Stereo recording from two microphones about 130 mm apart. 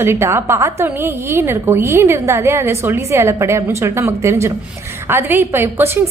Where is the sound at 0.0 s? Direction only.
20° right (ahead or behind).